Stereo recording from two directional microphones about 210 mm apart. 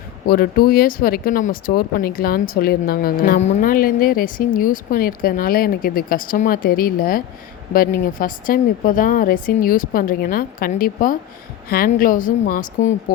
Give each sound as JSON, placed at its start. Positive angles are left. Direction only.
{"t": 0.3, "sound": "a woman's voice", "side_deg": 45}